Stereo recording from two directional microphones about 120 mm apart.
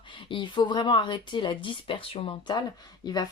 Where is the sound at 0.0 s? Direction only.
45° left (ahead or behind).